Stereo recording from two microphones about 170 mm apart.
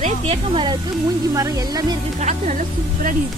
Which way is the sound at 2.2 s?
45° right (ahead or behind).